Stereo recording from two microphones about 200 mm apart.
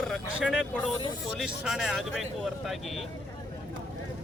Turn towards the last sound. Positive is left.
turn(degrees=0)  # may be behind; listen again after turning